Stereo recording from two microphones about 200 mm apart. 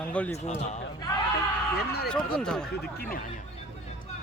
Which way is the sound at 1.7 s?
55° left (ahead or behind).